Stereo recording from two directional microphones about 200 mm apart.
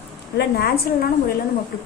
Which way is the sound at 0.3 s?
50° left (ahead or behind).